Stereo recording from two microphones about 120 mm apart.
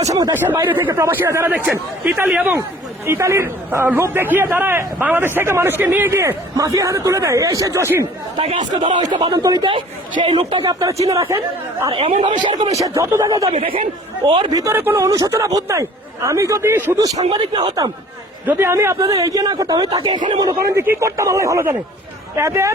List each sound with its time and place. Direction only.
0.0 s a woman's voice: 30° right (ahead or behind)
0.3 s speech: 15° right (ahead or behind)
3.1 s a man's voice: 25° right (ahead or behind)
8.4 s a woman's voice: 50° right (ahead or behind)
10.6 s a woman's voice: 30° right (ahead or behind)
11.9 s speech: 50° right (ahead or behind)
12.4 s a woman's voice: 40° right (ahead or behind)
12.7 s a man's voice: 30° right (ahead or behind)
13.6 s a woman's voice: 50° right (ahead or behind)
14.6 s a man's voice: 20° right (ahead or behind)
15.0 s a man's voice: 30° right (ahead or behind)
17.3 s a woman's voice: 40° right (ahead or behind)
18.4 s a man's voice: 20° right (ahead or behind); by 20.6 s 40° right (ahead or behind)
20.7 s a man's voice: 20° right (ahead or behind)